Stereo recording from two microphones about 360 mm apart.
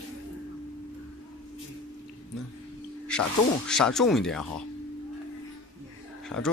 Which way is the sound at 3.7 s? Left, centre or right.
Centre.